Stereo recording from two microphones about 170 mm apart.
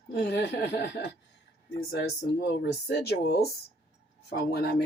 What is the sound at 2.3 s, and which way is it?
Speech, 75° left (ahead or behind).